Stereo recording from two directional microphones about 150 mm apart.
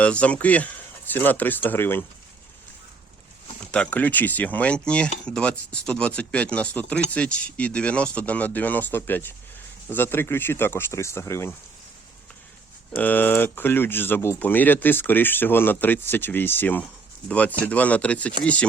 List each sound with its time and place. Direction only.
0.0 s speech: 10° left (ahead or behind)
3.6 s speech: 5° left (ahead or behind)
13.0 s speech: 10° left (ahead or behind)